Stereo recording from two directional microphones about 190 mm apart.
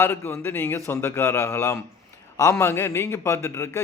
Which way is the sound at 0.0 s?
10° left (ahead or behind).